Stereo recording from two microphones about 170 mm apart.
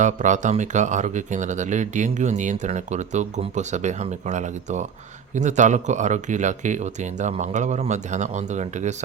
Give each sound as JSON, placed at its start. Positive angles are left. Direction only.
{"t": 0.0, "sound": "speech", "side_deg": -45}